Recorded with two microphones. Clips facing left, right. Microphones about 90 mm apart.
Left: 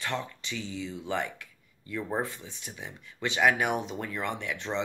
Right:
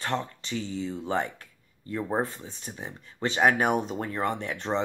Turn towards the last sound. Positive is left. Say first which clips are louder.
# right 4 dB
turn(degrees=-40)  # may be behind; listen again after turning